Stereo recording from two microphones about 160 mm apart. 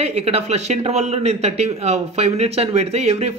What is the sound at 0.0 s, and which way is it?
Speech, 40° right (ahead or behind).